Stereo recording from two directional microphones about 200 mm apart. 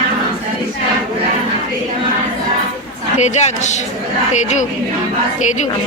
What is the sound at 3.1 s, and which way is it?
A woman's voice, 35° left (ahead or behind).